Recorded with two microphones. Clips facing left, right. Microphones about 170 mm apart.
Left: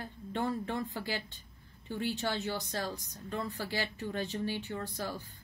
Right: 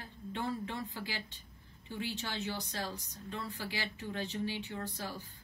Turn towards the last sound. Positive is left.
turn(degrees=50)  # may be behind; listen again after turning